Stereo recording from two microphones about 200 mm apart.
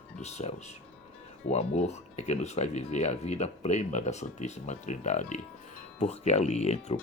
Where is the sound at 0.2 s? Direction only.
35° left (ahead or behind).